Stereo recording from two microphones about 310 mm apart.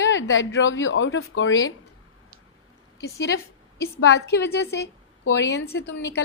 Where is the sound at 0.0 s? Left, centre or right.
Left.